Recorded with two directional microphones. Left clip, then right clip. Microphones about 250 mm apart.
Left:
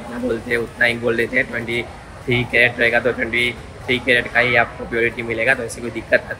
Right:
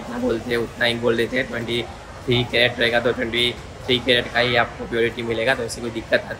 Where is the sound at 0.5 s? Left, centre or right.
Centre.